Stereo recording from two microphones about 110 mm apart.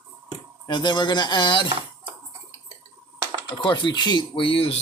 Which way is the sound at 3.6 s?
45° left (ahead or behind).